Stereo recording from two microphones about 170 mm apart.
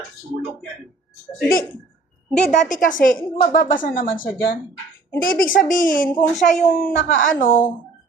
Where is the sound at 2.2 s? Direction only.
5° left (ahead or behind).